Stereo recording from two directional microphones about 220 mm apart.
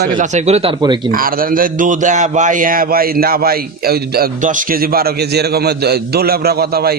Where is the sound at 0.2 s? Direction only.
30° right (ahead or behind).